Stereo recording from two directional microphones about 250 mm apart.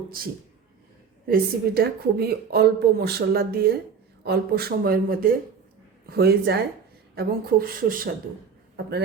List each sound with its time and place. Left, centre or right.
0.2 s a man's voice: right